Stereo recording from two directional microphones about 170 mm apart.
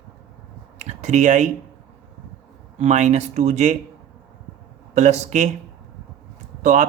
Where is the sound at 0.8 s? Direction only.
45° right (ahead or behind).